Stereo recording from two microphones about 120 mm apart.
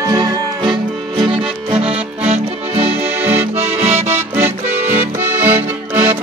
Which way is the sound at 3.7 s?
65° right (ahead or behind).